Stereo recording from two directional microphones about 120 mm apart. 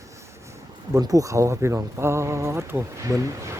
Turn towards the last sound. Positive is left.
turn(degrees=-25)  # may be behind; listen again after turning